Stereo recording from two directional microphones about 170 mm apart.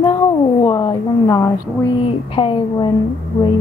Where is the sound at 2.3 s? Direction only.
30° left (ahead or behind).